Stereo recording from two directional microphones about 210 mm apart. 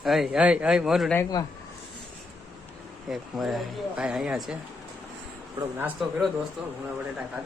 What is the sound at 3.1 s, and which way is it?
Speech, centre (ahead or behind).